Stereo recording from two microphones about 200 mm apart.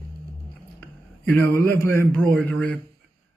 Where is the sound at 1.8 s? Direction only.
10° left (ahead or behind).